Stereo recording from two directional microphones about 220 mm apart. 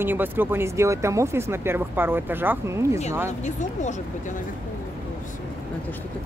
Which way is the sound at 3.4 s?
35° left (ahead or behind).